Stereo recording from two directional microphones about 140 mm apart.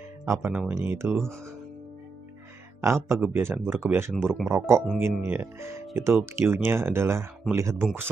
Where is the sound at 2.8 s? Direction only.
20° right (ahead or behind).